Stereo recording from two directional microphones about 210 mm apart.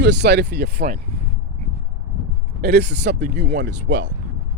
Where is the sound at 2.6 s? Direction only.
50° right (ahead or behind).